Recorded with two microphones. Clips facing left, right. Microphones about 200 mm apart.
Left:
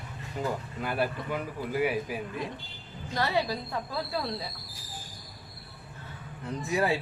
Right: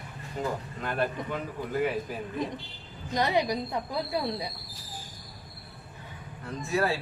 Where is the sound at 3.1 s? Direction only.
20° right (ahead or behind).